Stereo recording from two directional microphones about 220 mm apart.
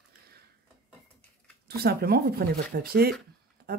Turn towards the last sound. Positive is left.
turn(degrees=-45)  # may be behind; listen again after turning